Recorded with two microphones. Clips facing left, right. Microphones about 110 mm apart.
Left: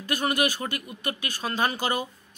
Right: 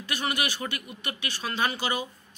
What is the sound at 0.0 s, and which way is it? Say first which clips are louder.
Speech: left 5 dB; 45° left (ahead or behind).